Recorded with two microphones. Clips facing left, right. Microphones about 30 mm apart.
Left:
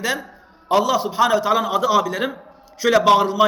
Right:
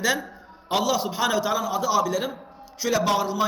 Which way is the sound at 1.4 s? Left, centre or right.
Left.